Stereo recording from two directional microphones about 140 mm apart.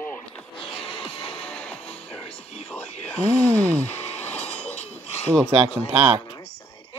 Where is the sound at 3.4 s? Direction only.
10° left (ahead or behind).